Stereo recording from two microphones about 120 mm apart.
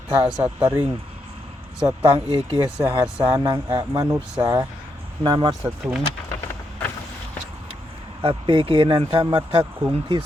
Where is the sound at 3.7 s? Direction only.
30° right (ahead or behind).